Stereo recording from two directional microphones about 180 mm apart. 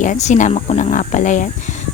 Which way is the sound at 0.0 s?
45° left (ahead or behind).